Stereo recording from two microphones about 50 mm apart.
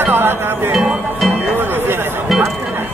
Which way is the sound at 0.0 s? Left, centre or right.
Right.